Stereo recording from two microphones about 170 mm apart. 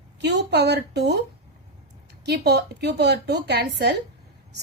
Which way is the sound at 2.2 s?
75° right (ahead or behind).